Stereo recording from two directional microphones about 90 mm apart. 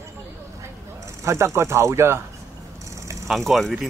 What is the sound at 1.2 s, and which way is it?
Speech, 35° right (ahead or behind).